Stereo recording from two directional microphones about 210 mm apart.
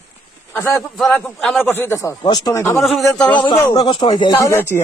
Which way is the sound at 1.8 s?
15° left (ahead or behind).